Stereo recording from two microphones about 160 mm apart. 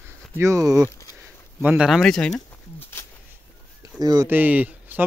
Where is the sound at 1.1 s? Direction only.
10° right (ahead or behind).